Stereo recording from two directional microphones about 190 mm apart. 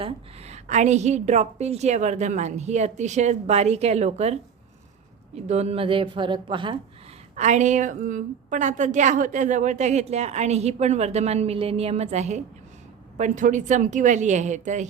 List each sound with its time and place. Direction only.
0.0 s a woman's voice: 35° right (ahead or behind)
5.5 s a woman's voice: 35° right (ahead or behind)
7.3 s a woman's voice: 40° right (ahead or behind)